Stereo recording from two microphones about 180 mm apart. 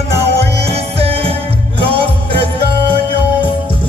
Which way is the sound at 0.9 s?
30° right (ahead or behind).